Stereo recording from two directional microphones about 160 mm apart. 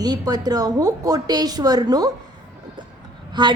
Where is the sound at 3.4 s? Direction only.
30° right (ahead or behind).